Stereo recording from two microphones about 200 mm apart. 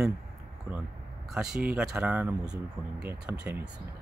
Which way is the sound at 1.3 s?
Centre (ahead or behind).